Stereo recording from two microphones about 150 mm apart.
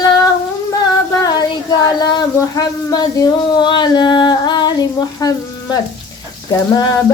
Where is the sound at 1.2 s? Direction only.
25° left (ahead or behind).